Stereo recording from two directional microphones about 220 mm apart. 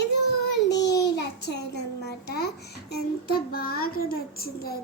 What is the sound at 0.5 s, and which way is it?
Child singing, 50° left (ahead or behind).